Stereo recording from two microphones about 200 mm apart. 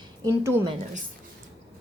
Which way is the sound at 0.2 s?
15° right (ahead or behind).